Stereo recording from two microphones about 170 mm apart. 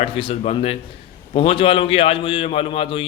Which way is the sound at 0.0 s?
35° left (ahead or behind).